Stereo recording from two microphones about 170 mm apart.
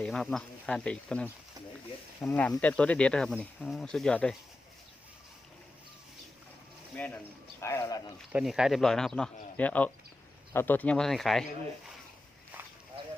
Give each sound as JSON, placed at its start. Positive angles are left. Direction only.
{"t": 0.0, "sound": "speech", "side_deg": 0}
{"t": 6.9, "sound": "speech", "side_deg": 10}
{"t": 8.3, "sound": "speech", "side_deg": -5}